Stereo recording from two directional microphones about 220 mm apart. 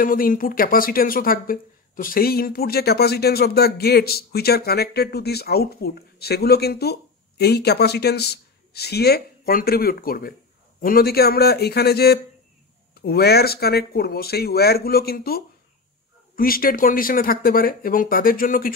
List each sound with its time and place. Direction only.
0.0 s speech: 40° left (ahead or behind)